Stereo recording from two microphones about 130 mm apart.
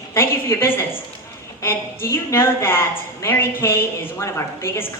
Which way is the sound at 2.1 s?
20° left (ahead or behind).